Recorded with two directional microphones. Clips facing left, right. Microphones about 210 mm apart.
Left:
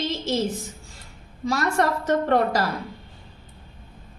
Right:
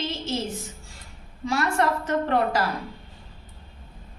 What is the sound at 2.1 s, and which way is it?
Speech, 40° left (ahead or behind).